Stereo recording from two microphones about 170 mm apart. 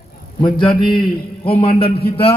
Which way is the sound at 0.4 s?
30° left (ahead or behind).